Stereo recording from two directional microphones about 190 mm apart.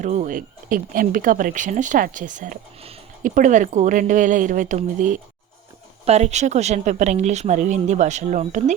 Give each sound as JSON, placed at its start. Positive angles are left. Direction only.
{"t": 0.0, "sound": "speech", "side_deg": -40}